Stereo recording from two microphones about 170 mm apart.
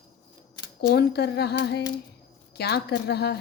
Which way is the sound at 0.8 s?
80° left.